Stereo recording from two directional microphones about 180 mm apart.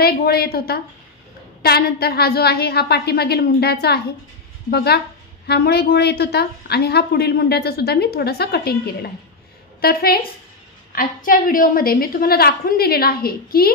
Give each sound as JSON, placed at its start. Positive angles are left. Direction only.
{"t": 0.0, "sound": "a woman's voice", "side_deg": 60}